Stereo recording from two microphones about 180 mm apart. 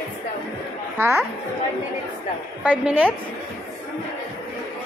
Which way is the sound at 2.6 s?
10° right (ahead or behind).